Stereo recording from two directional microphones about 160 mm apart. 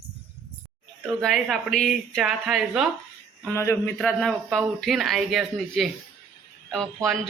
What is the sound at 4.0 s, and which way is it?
Speech, 5° left (ahead or behind).